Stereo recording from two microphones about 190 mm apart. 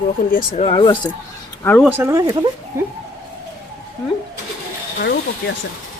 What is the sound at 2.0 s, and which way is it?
Speech, 15° right (ahead or behind).